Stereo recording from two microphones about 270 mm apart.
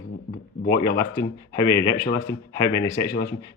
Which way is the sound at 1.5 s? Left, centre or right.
Centre.